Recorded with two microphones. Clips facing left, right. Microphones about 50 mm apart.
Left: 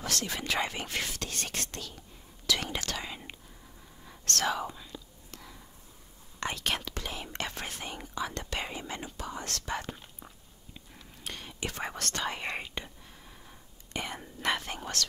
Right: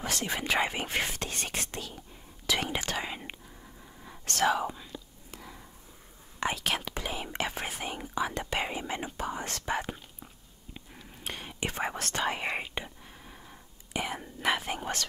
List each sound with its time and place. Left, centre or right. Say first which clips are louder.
0.0 s speech: right 2 dB; centre
4.0 s whispering: right 4 dB; centre
6.4 s speech: right 2 dB; centre
11.2 s whispering: right 2 dB; centre